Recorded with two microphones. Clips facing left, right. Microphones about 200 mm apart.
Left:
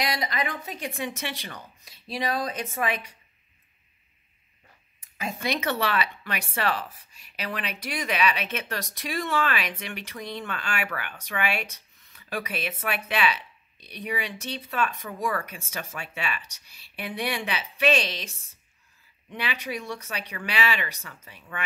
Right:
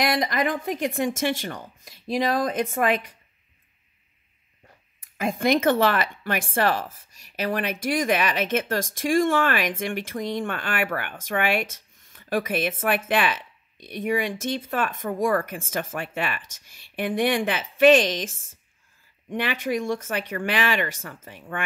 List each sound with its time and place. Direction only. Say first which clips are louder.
0.0 s speech: right 6 dB; 50° right (ahead or behind)
5.1 s speech: right 8 dB; 50° right (ahead or behind)